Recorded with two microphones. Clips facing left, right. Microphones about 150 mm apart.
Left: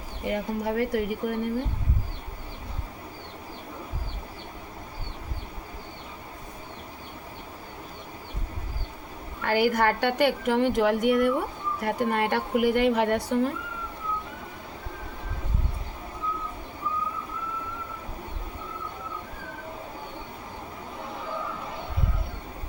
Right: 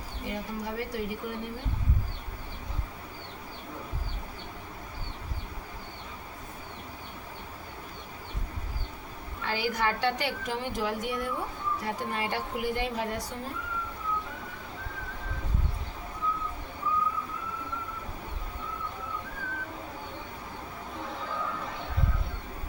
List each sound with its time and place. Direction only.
0.3 s a woman's voice: 55° left (ahead or behind)
9.4 s a woman's voice: 55° left (ahead or behind); by 13.5 s 70° left (ahead or behind)